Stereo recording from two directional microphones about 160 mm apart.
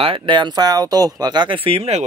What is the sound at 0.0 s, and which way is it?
Speech, 35° right (ahead or behind).